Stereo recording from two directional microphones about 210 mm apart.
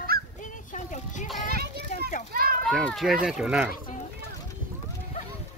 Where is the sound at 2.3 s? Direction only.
45° right (ahead or behind).